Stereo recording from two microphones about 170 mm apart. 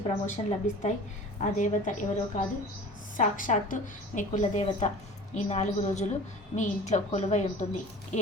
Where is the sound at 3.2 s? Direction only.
50° left (ahead or behind).